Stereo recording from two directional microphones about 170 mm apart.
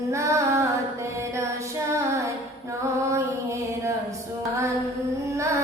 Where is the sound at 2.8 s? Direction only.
15° right (ahead or behind).